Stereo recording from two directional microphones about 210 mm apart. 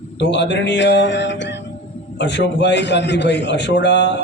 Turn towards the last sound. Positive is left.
turn(degrees=55)  # may be behind; listen again after turning